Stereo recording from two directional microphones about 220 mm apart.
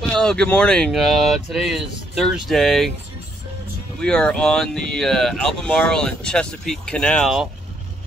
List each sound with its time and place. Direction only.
0.1 s speech: 5° left (ahead or behind)
4.0 s speech: 5° left (ahead or behind)